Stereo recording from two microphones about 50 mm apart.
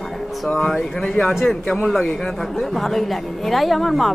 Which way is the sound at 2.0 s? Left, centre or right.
Centre.